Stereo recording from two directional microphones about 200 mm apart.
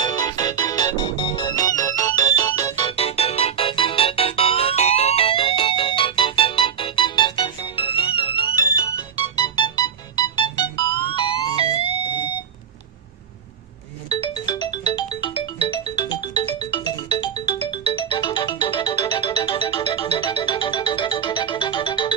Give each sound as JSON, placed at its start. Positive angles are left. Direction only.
{"t": 0.0, "sound": "music", "side_deg": 20}
{"t": 2.9, "sound": "music", "side_deg": 30}
{"t": 14.1, "sound": "music", "side_deg": 20}